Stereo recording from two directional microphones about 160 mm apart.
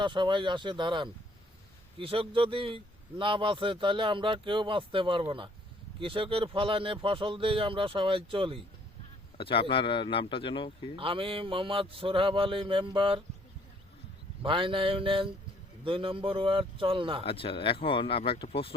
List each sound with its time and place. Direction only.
0.0 s speech: 30° right (ahead or behind)
9.4 s speech: 35° left (ahead or behind)
10.9 s speech: 35° right (ahead or behind)
14.4 s speech: 35° right (ahead or behind)
17.2 s speech: 35° left (ahead or behind)